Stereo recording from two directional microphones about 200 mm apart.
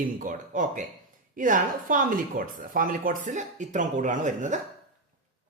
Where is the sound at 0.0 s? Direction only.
40° right (ahead or behind).